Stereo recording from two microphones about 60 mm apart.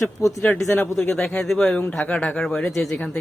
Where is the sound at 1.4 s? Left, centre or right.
Centre.